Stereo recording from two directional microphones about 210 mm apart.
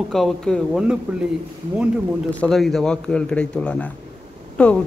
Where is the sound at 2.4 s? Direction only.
Centre (ahead or behind).